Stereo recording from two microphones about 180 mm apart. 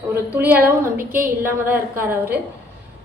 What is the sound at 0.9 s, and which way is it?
Speech, 50° right (ahead or behind).